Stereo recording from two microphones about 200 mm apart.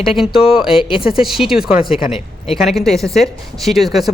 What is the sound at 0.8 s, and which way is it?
Speech, 25° left (ahead or behind).